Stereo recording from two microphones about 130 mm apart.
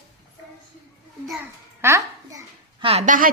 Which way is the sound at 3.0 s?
85° right.